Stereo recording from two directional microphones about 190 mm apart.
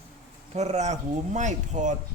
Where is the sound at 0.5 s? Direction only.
35° right (ahead or behind).